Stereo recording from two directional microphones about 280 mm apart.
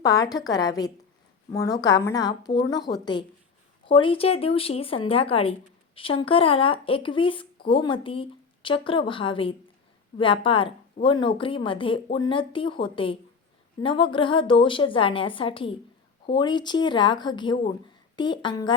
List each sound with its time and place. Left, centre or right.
0.0 s a woman's voice: centre